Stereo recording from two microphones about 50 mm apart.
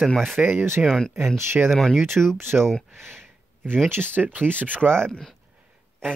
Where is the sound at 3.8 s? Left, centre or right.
Right.